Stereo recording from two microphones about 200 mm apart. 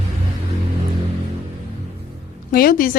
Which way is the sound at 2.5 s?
50° left (ahead or behind).